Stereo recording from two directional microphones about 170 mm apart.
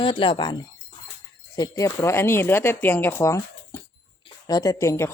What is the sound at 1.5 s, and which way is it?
Speech, 20° left (ahead or behind).